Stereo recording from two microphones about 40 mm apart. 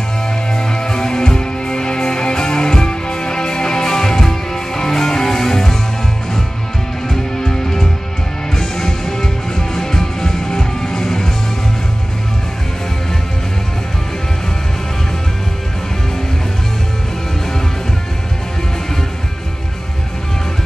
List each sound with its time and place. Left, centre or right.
0.5 s music: centre
7.1 s music: centre